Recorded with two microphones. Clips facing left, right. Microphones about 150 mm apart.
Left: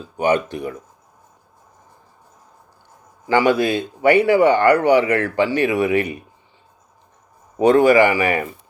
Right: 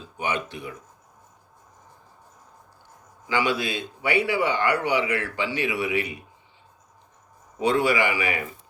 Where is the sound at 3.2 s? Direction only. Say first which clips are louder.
Left 9 dB; 50° left (ahead or behind).